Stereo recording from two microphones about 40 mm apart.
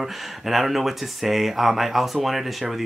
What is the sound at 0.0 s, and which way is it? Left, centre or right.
Speech, centre.